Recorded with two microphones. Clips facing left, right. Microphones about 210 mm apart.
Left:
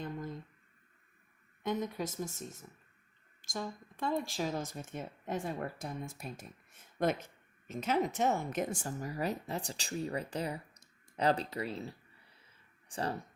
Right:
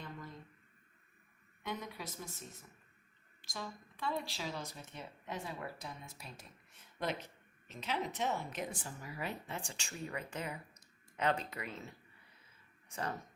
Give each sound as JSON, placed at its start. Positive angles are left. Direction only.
{"t": 1.6, "sound": "speech", "side_deg": 45}